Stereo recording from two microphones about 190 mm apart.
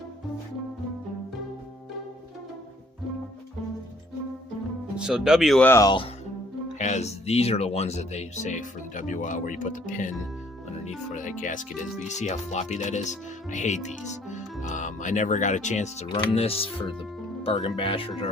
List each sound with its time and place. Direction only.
4.9 s speech: 5° right (ahead or behind); by 6.1 s 20° left (ahead or behind)
6.7 s speech: 40° left (ahead or behind)